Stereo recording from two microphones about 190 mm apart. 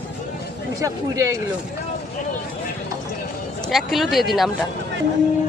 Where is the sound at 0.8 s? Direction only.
15° right (ahead or behind).